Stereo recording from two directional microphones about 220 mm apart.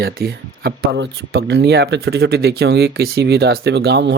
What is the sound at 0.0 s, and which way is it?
Speech, 45° right (ahead or behind).